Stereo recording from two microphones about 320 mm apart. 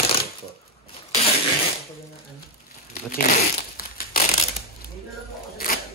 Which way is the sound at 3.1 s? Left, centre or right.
Left.